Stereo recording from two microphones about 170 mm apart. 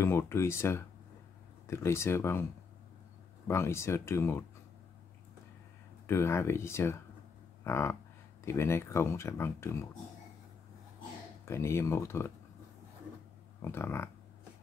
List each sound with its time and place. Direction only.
0.0 s speech: 15° left (ahead or behind)
3.4 s speech: 15° left (ahead or behind)
6.0 s speech: 15° left (ahead or behind)
11.4 s speech: 15° left (ahead or behind)
13.6 s speech: 15° left (ahead or behind)